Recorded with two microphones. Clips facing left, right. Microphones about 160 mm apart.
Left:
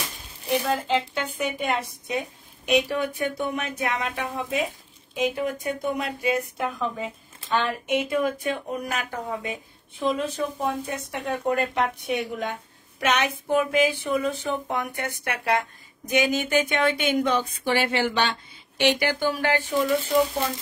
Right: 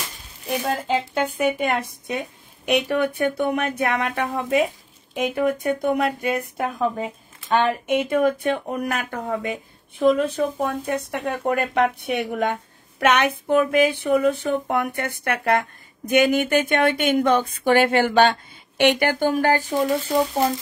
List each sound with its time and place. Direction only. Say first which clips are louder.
0.7 s speech: right 1 dB; 45° right (ahead or behind)